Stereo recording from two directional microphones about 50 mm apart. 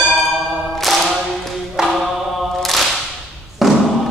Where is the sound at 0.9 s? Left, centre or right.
Centre.